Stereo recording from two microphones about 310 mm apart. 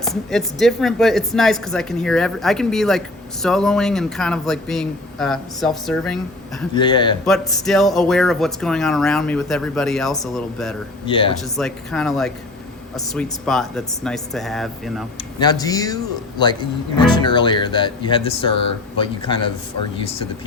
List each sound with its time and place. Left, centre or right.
0.0 s speech: centre
6.7 s speech: centre
7.3 s speech: centre
11.0 s speech: centre
11.5 s speech: centre
15.4 s speech: centre